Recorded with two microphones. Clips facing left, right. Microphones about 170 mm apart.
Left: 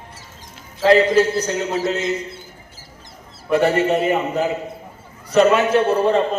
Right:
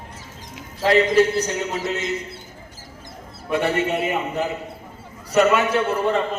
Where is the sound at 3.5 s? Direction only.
35° left (ahead or behind).